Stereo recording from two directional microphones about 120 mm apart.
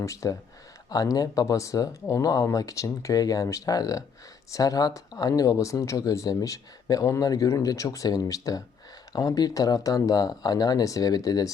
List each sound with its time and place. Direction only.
0.0 s speech: 25° left (ahead or behind)